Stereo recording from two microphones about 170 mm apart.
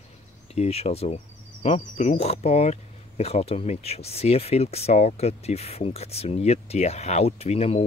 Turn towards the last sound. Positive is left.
turn(degrees=40)  # may be behind; listen again after turning